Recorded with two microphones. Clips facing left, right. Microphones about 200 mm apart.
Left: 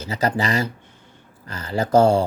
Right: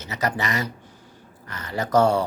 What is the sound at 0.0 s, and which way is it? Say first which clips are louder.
Speech: left 4 dB; 30° left (ahead or behind).